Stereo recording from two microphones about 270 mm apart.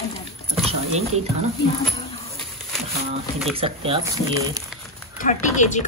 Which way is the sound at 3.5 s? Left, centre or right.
Centre.